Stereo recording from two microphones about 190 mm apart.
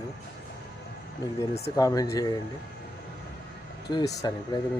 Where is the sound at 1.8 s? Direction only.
15° left (ahead or behind).